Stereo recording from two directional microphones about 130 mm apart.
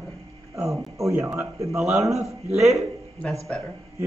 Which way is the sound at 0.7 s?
25° right (ahead or behind).